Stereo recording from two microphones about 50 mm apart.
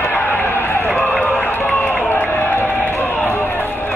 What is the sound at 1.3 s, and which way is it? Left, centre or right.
Run, left.